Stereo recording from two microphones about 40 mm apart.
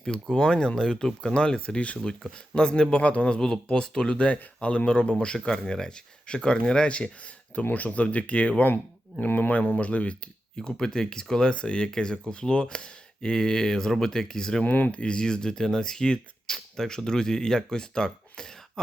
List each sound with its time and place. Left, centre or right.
0.3 s speech: centre
2.6 s speech: left
5.5 s speech: centre
7.7 s speech: left
9.1 s speech: left
10.8 s speech: centre
14.6 s speech: left
14.9 s speech: left